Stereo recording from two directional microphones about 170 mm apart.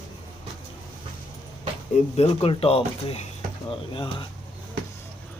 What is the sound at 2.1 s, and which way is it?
Speech, 35° left (ahead or behind).